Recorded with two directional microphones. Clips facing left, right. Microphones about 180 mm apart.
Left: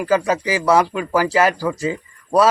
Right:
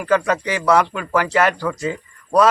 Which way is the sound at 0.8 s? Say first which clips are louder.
Left 1 dB; 30° left (ahead or behind).